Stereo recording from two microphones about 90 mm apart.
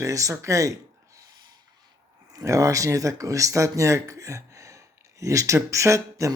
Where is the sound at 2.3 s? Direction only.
40° right (ahead or behind).